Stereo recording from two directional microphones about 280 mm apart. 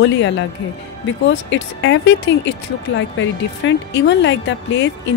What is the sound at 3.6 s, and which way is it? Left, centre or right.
Speech, left.